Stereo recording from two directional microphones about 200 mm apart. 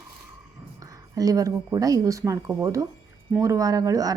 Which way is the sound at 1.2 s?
15° right (ahead or behind).